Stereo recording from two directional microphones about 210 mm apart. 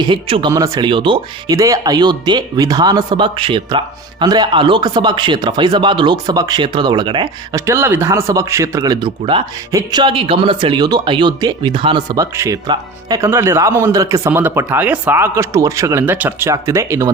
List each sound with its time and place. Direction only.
0.0 s speech: 25° right (ahead or behind)